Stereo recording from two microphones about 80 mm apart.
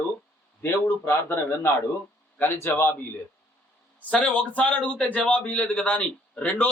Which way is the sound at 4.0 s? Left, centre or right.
Centre.